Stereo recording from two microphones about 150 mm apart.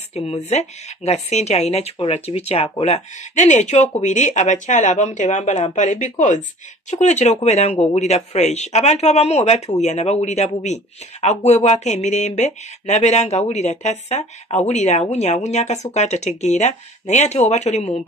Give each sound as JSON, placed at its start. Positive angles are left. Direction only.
{"t": 0.1, "sound": "speech", "side_deg": 45}